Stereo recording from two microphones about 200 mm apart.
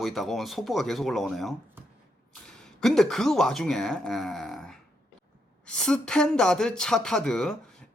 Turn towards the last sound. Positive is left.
turn(degrees=0)  # may be behind; listen again after turning